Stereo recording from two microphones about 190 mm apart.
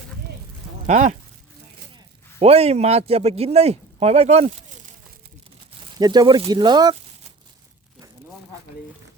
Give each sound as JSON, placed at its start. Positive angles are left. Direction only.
{"t": 0.9, "sound": "speech", "side_deg": -40}
{"t": 2.4, "sound": "speech", "side_deg": -30}
{"t": 6.0, "sound": "speech", "side_deg": -20}